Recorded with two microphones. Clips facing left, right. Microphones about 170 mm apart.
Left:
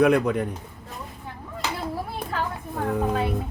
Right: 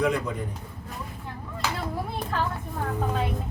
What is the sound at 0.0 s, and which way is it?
Speech, 65° left (ahead or behind).